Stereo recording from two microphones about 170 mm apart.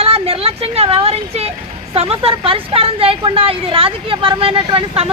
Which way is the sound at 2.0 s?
35° right (ahead or behind).